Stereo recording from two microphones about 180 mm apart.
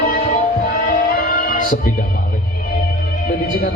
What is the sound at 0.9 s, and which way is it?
Music, 50° left (ahead or behind).